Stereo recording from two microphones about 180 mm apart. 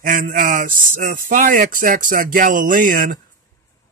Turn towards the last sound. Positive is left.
turn(degrees=-50)  # may be behind; listen again after turning